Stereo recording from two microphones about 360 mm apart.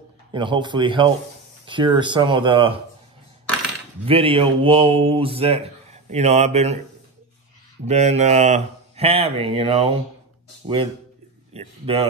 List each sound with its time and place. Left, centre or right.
0.3 s speech: centre
4.0 s speech: centre
7.8 s speech: centre
11.8 s speech: centre